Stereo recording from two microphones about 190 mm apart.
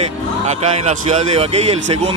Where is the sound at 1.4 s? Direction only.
35° right (ahead or behind).